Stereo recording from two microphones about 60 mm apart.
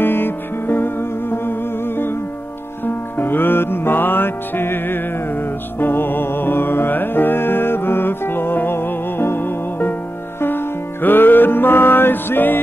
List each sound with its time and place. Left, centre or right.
0.0 s music: left